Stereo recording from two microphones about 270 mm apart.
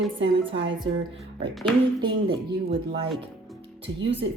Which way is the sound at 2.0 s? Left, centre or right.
Centre.